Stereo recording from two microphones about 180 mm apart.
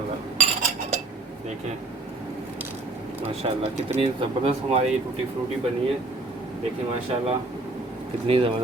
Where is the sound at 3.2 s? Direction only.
35° right (ahead or behind).